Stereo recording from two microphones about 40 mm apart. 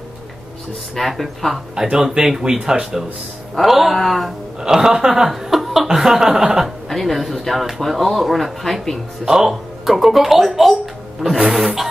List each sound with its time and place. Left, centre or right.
0.9 s speech: centre
1.8 s speech: centre
4.6 s speech: centre
6.6 s speech: centre
9.2 s speech: centre
11.3 s music: right